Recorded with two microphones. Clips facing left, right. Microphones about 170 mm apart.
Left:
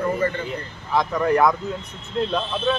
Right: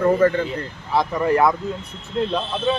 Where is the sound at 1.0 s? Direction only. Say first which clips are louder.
Right 1 dB; 5° right (ahead or behind).